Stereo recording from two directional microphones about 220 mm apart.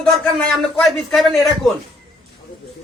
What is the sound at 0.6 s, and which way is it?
A man's voice, centre (ahead or behind).